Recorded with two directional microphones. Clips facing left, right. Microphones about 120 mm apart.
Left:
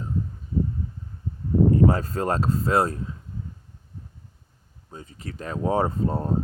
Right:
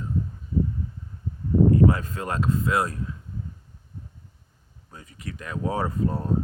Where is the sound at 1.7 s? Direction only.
35° left (ahead or behind).